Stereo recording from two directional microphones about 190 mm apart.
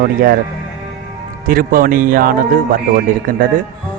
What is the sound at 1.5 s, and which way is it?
A man's voice, 50° right (ahead or behind).